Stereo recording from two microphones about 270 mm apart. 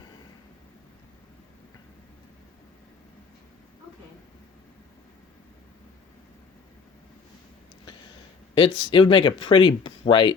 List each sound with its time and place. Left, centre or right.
8.5 s speech: centre